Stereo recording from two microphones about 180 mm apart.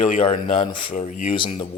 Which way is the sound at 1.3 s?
30° left (ahead or behind).